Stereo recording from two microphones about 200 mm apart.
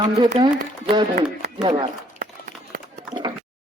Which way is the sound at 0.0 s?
25° right (ahead or behind).